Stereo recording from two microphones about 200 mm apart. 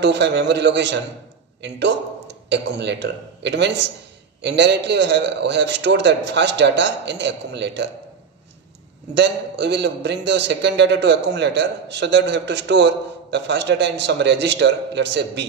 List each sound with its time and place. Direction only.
0.0 s a man's voice: 60° right (ahead or behind)
9.1 s a man's voice: 60° right (ahead or behind)